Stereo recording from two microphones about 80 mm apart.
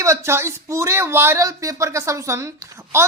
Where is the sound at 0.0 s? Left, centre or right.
Right.